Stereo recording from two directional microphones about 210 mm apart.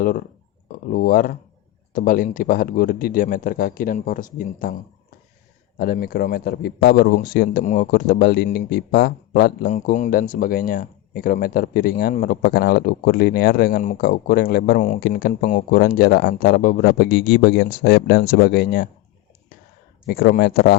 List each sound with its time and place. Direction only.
0.9 s a man's voice: 40° left (ahead or behind)
20.1 s a man's voice: 45° left (ahead or behind)